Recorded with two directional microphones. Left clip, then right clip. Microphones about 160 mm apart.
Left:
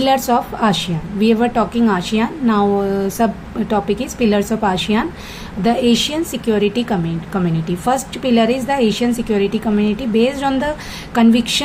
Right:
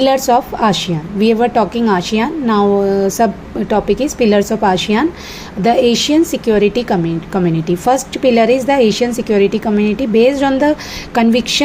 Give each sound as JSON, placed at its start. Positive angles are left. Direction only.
{"t": 0.0, "sound": "speech", "side_deg": -25}